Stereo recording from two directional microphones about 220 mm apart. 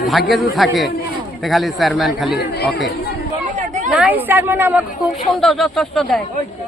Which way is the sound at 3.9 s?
5° right (ahead or behind).